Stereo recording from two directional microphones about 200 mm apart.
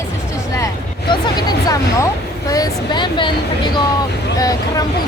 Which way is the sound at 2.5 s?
20° left (ahead or behind).